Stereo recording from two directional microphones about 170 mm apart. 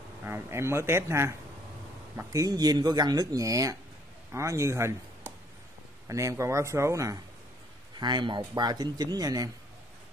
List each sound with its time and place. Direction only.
0.2 s speech: 15° right (ahead or behind)
6.0 s speech: 20° right (ahead or behind)